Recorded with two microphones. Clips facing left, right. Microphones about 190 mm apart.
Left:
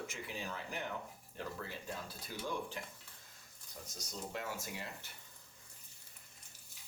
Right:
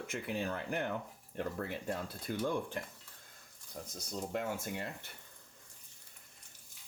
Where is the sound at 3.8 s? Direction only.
55° right (ahead or behind).